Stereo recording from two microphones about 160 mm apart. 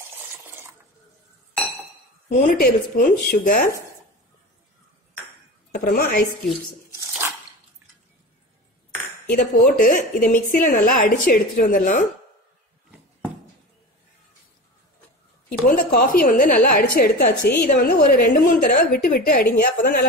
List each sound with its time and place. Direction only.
0.4 s dishes: 15° right (ahead or behind)
2.2 s a woman's voice: 60° left (ahead or behind)
5.7 s a woman's voice: 55° left (ahead or behind)
6.9 s dog: 20° right (ahead or behind)
9.3 s a woman's voice: 60° left (ahead or behind)
15.6 s a woman's voice: 65° left (ahead or behind)